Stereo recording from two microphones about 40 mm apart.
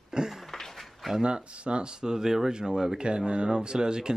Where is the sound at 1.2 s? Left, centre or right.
Right.